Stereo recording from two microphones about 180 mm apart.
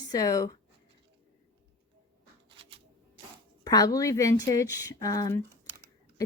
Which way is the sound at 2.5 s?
30° right (ahead or behind).